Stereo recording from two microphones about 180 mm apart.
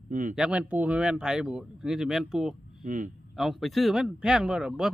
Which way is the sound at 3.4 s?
Centre (ahead or behind).